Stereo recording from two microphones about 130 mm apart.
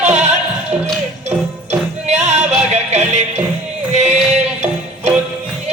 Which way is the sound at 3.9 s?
60° right (ahead or behind).